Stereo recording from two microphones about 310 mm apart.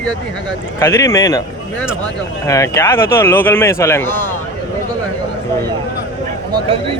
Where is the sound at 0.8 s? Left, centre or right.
Centre.